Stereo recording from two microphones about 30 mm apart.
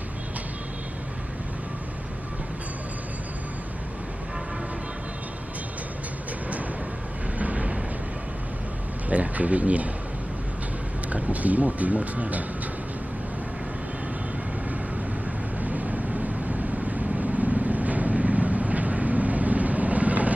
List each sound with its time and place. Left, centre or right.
7.3 s vehicle: right
9.1 s a sound: right
11.1 s speech: right
15.6 s vehicle: right